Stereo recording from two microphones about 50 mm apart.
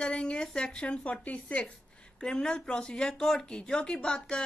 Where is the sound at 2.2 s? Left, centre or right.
Centre.